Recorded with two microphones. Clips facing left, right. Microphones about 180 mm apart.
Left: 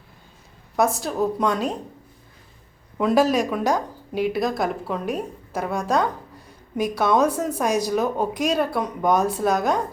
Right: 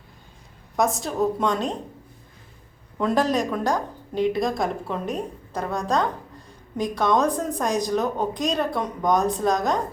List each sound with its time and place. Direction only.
0.8 s a woman's voice: centre (ahead or behind)
3.0 s a woman's voice: 10° left (ahead or behind)